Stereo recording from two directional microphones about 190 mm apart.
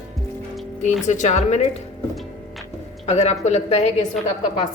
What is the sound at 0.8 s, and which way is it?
Speech, 40° left (ahead or behind).